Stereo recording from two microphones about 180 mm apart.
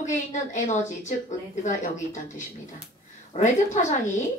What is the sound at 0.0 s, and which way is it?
A woman's voice, 40° left (ahead or behind).